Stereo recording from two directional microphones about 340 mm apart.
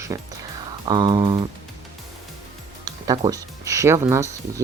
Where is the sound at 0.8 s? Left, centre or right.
Centre.